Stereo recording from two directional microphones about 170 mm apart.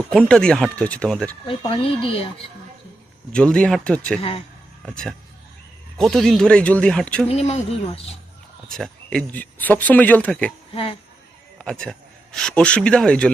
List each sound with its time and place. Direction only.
0.1 s a man's voice: 5° left (ahead or behind)
1.5 s speech: 30° left (ahead or behind)
3.3 s a man's voice: 5° left (ahead or behind)
4.2 s speech: 35° left (ahead or behind)
6.0 s a man's voice: centre (ahead or behind)
7.3 s speech: 35° left (ahead or behind)
8.7 s speech: 5° left (ahead or behind)
11.5 s a man's voice: 5° left (ahead or behind)